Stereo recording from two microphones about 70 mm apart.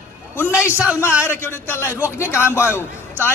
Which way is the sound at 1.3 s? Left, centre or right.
Left.